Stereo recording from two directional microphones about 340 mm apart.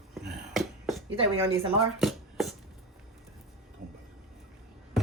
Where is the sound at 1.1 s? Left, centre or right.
Centre.